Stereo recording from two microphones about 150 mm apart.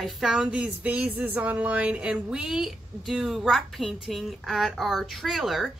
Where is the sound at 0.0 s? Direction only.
5° right (ahead or behind).